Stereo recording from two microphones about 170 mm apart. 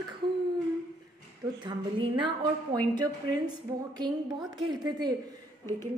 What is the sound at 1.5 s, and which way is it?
A woman's voice, 30° right (ahead or behind).